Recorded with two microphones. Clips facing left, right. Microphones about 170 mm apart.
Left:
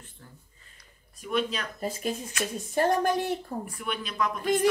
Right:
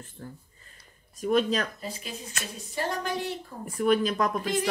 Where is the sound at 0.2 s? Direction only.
40° right (ahead or behind).